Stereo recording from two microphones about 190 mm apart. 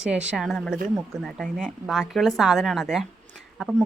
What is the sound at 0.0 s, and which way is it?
A woman's voice, 5° right (ahead or behind).